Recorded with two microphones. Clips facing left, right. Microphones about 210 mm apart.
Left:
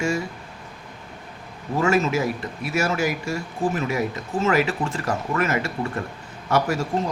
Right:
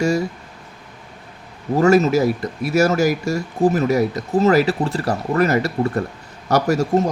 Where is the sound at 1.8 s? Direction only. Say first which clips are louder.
Right 7 dB; 40° right (ahead or behind).